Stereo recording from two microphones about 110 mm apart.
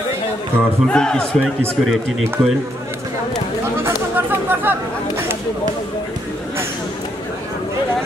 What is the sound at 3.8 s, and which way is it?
Chatter, 20° right (ahead or behind).